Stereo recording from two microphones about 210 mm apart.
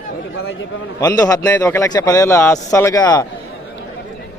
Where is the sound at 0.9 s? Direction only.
15° left (ahead or behind).